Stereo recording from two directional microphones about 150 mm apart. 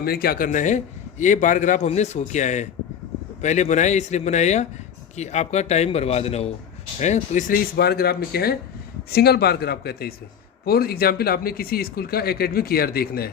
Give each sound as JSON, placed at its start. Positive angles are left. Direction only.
{"t": 0.0, "sound": "a man's voice", "side_deg": 90}